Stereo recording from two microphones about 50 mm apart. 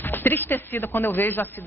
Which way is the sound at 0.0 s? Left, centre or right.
Left.